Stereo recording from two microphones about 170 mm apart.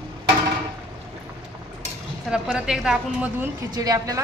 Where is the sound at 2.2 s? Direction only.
5° right (ahead or behind).